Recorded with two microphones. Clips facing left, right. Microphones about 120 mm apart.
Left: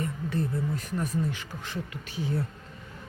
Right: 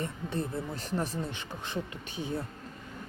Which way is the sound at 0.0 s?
25° right (ahead or behind).